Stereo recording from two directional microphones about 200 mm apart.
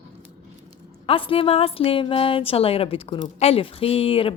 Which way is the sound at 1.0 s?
25° left (ahead or behind).